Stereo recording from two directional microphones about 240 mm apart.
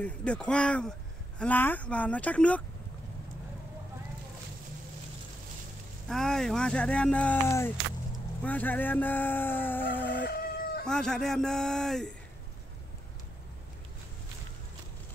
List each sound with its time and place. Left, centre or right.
0.0 s speech: centre
6.0 s speech: centre
10.1 s fowl: left
10.9 s speech: centre